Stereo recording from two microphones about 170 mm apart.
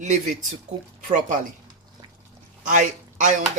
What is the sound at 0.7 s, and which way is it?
Speech, 45° right (ahead or behind).